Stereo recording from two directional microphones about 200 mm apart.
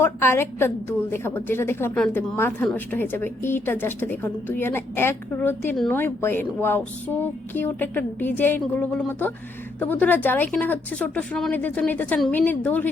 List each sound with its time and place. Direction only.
0.0 s a woman's voice: 10° left (ahead or behind)